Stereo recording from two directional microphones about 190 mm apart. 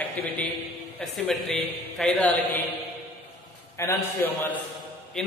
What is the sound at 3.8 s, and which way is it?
A man's voice, 10° left (ahead or behind).